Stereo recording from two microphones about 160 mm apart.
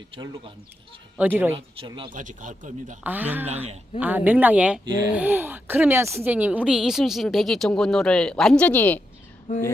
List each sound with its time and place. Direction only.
1.1 s speech: 10° right (ahead or behind)
1.5 s speech: 35° right (ahead or behind)
2.0 s speech: 55° right (ahead or behind)
3.0 s speech: 10° right (ahead or behind)
3.4 s speech: 40° right (ahead or behind)
4.0 s speech: 10° right (ahead or behind); by 9.0 s 10° left (ahead or behind)
9.5 s a sound: 50° left (ahead or behind)